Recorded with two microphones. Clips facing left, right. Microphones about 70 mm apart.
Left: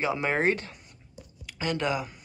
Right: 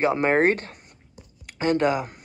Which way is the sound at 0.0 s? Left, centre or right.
Right.